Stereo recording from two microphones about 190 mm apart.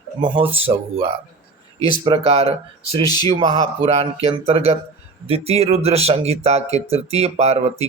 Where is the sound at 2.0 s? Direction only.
25° right (ahead or behind).